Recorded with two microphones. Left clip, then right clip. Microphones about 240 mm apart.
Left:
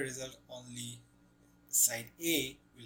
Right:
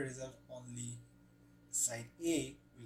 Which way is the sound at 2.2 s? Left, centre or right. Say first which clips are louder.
Left 3 dB; centre.